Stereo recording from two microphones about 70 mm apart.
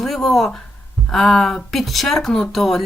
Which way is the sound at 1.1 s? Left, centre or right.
Centre.